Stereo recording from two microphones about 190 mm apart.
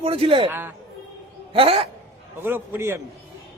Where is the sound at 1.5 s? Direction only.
30° right (ahead or behind).